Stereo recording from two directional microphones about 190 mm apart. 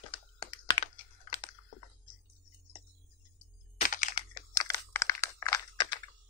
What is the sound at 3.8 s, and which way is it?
Computer keyboard, 40° left (ahead or behind).